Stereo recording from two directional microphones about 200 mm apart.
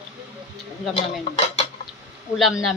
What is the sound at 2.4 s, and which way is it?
Speech, centre (ahead or behind).